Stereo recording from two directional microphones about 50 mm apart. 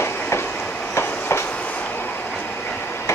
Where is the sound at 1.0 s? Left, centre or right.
Left.